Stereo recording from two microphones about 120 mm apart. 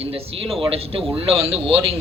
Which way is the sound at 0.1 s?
55° right (ahead or behind).